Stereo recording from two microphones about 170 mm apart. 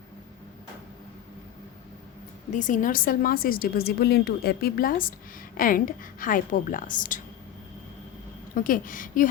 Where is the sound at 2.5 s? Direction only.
50° left (ahead or behind).